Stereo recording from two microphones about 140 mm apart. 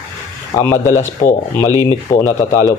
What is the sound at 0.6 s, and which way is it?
Speech, 20° left (ahead or behind).